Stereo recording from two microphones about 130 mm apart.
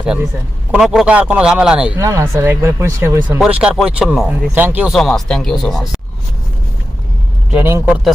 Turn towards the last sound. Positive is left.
turn(degrees=-20)  # may be behind; listen again after turning